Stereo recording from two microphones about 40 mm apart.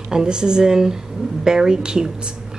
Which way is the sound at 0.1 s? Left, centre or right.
Centre.